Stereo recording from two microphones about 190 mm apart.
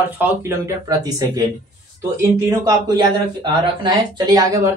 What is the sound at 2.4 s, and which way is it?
A man's voice, 20° right (ahead or behind).